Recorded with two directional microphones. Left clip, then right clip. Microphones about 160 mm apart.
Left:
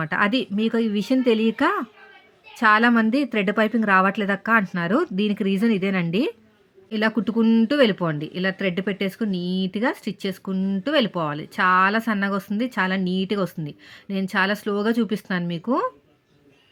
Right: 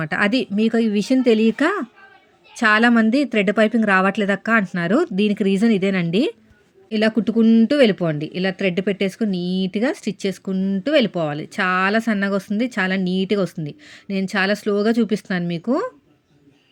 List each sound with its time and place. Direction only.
0.0 s speech: 10° right (ahead or behind)